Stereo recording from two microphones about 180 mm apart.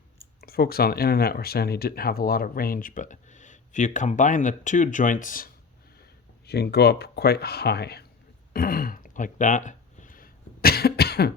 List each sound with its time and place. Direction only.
0.4 s speech: 60° left (ahead or behind)
6.0 s speech: 65° left (ahead or behind)
8.5 s a sound: 55° left (ahead or behind)